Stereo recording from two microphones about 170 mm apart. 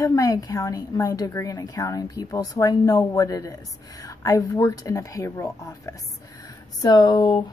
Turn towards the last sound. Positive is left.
turn(degrees=25)  # may be behind; listen again after turning